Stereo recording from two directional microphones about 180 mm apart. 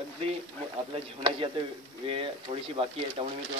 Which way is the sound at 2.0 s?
30° right (ahead or behind).